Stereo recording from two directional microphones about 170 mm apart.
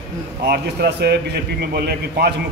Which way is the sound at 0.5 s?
70° right (ahead or behind).